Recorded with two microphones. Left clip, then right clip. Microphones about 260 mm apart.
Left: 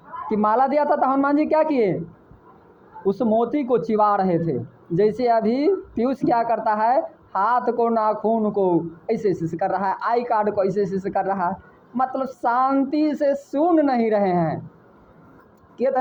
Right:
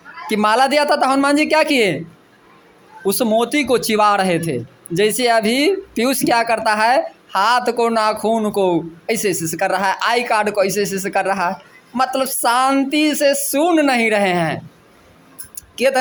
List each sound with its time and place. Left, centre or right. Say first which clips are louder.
0.3 s speech: right 4 dB; right
3.1 s speech: right 4 dB; right
15.5 s music: right 5 dB; right